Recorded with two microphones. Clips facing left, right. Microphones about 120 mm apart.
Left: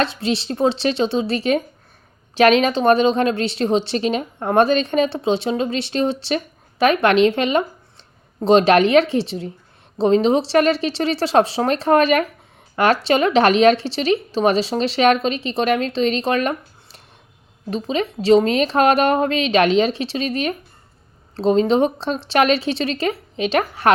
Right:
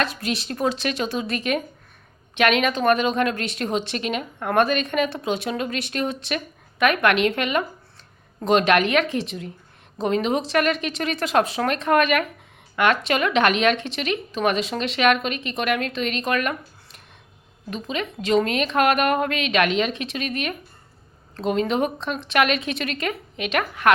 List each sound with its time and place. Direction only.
0.0 s a woman's voice: 30° left (ahead or behind)